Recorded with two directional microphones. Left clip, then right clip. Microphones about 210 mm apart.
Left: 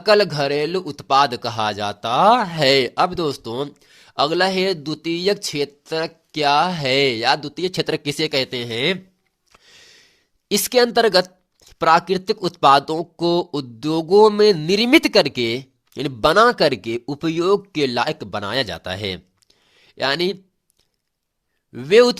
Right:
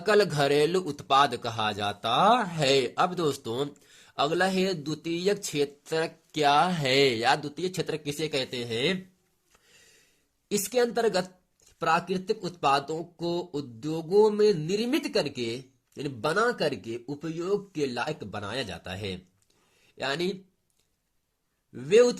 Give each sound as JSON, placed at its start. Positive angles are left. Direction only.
{"t": 0.0, "sound": "speech", "side_deg": 30}
{"t": 9.5, "sound": "a sound", "side_deg": 40}
{"t": 10.5, "sound": "a woman's voice", "side_deg": 40}
{"t": 21.7, "sound": "a woman's voice", "side_deg": 40}